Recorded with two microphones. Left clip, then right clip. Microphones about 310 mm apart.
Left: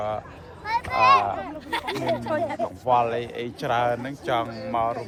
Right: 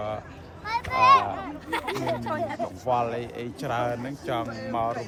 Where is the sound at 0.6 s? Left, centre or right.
Left.